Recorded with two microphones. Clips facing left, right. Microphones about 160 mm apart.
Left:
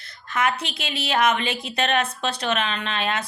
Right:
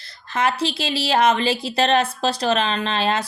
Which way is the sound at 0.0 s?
30° right (ahead or behind).